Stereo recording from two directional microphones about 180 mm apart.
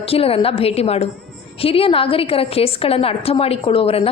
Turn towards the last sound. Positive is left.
turn(degrees=30)  # may be behind; listen again after turning